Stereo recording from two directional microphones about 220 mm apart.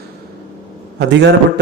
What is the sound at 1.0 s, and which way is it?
Speech, 50° right (ahead or behind).